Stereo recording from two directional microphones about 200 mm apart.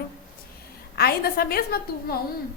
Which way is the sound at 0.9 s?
50° left (ahead or behind).